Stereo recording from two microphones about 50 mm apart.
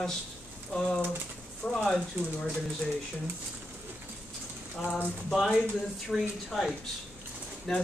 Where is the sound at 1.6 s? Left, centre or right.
Left.